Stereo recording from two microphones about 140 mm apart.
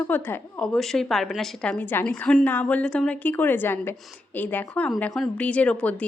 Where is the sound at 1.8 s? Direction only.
15° left (ahead or behind).